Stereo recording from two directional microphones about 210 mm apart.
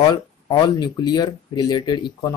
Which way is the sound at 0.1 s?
20° left (ahead or behind).